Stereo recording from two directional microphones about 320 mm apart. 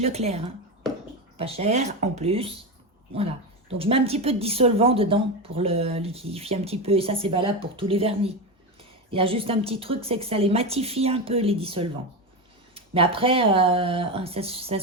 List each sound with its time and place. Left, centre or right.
0.0 s speech: centre
3.8 s speech: centre